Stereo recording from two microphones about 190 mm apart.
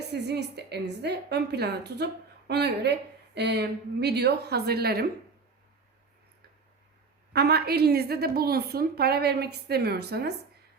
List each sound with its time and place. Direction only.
0.1 s a woman's voice: 60° right (ahead or behind)
7.3 s a woman's voice: 60° right (ahead or behind)